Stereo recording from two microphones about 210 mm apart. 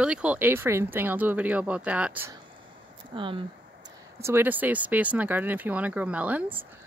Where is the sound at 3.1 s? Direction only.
25° right (ahead or behind).